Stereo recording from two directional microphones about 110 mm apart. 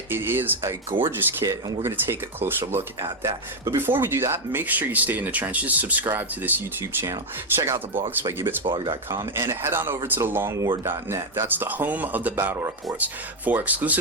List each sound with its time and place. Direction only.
0.1 s speech: 20° right (ahead or behind)
3.2 s speech: 30° right (ahead or behind)
3.8 s speech: 20° right (ahead or behind)
8.6 s speech: 50° right (ahead or behind)
9.0 s speech: 25° right (ahead or behind)